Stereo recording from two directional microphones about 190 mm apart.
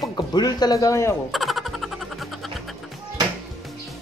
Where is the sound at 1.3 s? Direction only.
Centre (ahead or behind).